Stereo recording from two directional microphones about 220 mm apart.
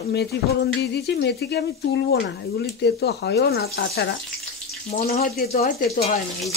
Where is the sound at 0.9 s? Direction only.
50° left (ahead or behind).